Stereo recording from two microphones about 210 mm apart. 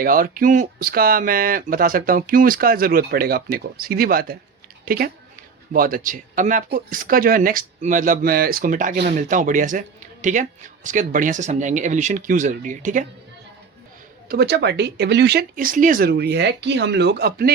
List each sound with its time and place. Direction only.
0.0 s speech: 45° right (ahead or behind)
14.3 s speech: 50° right (ahead or behind)